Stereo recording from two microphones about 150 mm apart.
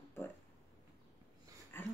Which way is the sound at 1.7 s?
15° left (ahead or behind).